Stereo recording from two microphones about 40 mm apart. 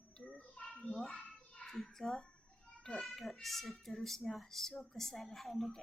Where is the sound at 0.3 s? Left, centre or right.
Left.